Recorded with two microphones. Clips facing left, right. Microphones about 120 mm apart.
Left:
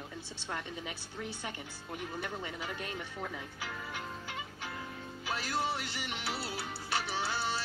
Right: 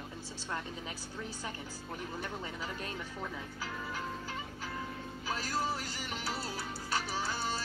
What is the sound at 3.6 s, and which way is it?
Music, 40° right (ahead or behind).